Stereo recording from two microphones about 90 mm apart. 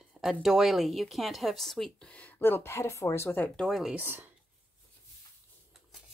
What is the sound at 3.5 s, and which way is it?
Speech, 5° left (ahead or behind).